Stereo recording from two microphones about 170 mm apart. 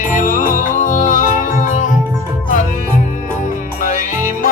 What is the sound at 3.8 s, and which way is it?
Music, 45° left (ahead or behind).